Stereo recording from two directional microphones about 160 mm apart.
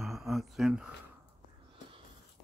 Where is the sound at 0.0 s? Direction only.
Centre (ahead or behind).